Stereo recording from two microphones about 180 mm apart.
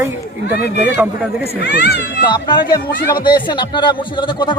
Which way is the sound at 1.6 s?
70° left (ahead or behind).